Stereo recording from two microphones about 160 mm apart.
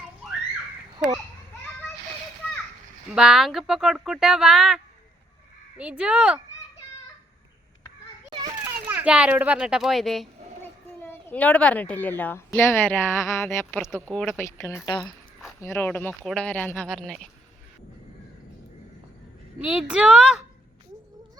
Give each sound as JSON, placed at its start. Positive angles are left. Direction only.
{"t": 3.1, "sound": "a woman's voice", "side_deg": -5}
{"t": 8.9, "sound": "speech", "side_deg": -10}
{"t": 10.6, "sound": "a sound", "side_deg": 10}
{"t": 12.5, "sound": "speech", "side_deg": 15}
{"t": 14.1, "sound": "speech", "side_deg": 5}
{"t": 14.3, "sound": "speech", "side_deg": 15}
{"t": 15.6, "sound": "speech", "side_deg": 15}
{"t": 19.6, "sound": "a woman's voice", "side_deg": -5}